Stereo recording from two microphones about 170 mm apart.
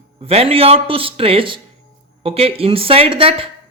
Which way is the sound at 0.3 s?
35° right (ahead or behind).